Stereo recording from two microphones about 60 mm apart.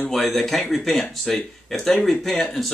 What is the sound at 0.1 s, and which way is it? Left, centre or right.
Speech, centre.